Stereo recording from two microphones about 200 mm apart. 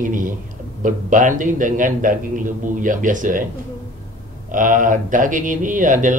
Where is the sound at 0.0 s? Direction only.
40° right (ahead or behind).